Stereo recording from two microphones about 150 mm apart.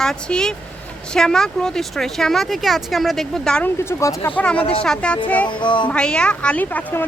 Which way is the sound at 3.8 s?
15° left (ahead or behind).